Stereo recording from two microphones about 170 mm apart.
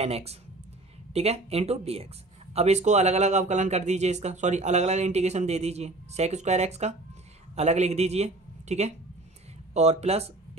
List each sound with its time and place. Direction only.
0.0 s speech: 40° right (ahead or behind)